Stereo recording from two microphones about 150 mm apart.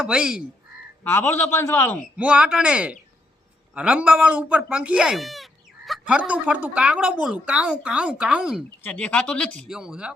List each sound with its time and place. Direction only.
0.0 s speech: 5° right (ahead or behind)
1.0 s a man's voice: 15° left (ahead or behind)
2.1 s speech: 10° right (ahead or behind)
8.8 s a man's voice: 10° left (ahead or behind)
9.7 s speech: 5° right (ahead or behind)